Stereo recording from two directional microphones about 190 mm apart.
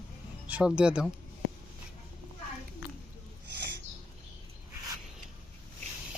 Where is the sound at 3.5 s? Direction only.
60° right (ahead or behind).